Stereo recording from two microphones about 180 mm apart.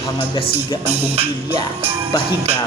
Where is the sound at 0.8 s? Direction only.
10° right (ahead or behind).